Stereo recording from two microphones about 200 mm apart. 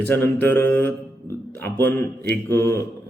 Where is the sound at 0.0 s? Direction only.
10° left (ahead or behind).